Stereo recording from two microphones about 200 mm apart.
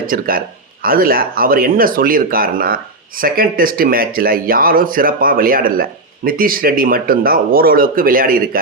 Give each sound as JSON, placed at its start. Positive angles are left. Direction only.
{"t": 0.1, "sound": "speech", "side_deg": -45}